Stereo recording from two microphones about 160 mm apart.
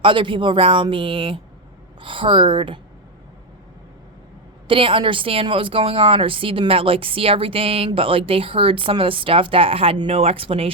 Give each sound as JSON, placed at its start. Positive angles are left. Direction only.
{"t": 0.0, "sound": "speech", "side_deg": -30}
{"t": 4.7, "sound": "speech", "side_deg": -35}